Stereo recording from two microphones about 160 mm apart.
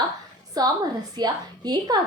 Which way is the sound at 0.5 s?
25° right (ahead or behind).